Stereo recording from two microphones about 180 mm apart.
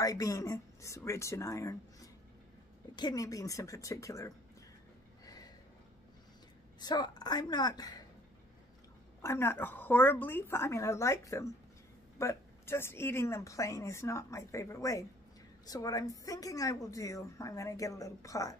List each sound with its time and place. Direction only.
0.0 s a woman's voice: 20° left (ahead or behind)
5.2 s a sound: 20° left (ahead or behind)
6.8 s speech: 25° left (ahead or behind)
9.2 s a woman's voice: 15° left (ahead or behind)